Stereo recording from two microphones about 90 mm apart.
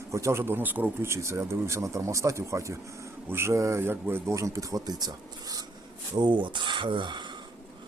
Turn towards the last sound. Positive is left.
turn(degrees=-65)  # may be behind; listen again after turning